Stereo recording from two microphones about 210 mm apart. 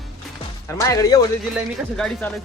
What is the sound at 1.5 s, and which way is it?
Speech, centre (ahead or behind).